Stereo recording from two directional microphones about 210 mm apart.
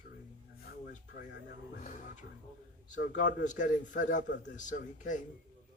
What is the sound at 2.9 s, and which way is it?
A man's voice, 35° left (ahead or behind).